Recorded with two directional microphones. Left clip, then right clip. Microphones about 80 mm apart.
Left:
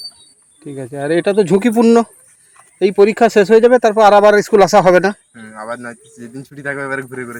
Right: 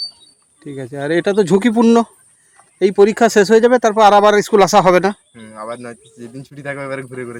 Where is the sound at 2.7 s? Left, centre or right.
Right.